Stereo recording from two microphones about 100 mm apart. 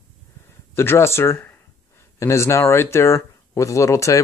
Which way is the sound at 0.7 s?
25° left (ahead or behind).